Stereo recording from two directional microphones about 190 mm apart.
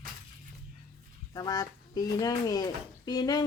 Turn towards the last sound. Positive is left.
turn(degrees=20)  # may be behind; listen again after turning